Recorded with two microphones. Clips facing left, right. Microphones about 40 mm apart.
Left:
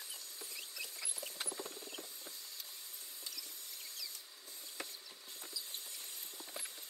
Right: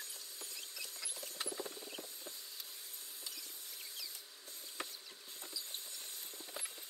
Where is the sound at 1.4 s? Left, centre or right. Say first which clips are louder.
Right 2 dB; centre.